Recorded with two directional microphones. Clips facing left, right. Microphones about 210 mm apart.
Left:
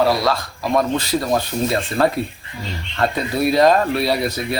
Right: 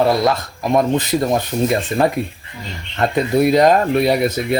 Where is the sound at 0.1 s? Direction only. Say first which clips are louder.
Right 3 dB; 20° right (ahead or behind).